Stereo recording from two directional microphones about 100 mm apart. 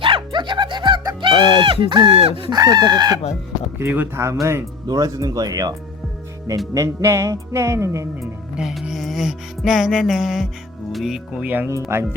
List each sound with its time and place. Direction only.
0.0 s music: 50° right (ahead or behind)
2.0 s speech: 70° right (ahead or behind)
2.5 s speech: 40° right (ahead or behind)
3.8 s speech: 20° right (ahead or behind)
4.9 s speech: 35° right (ahead or behind)
6.7 s speech: 30° right (ahead or behind)
8.2 s music: centre (ahead or behind)
10.9 s speech: centre (ahead or behind)
11.3 s speech: 15° right (ahead or behind)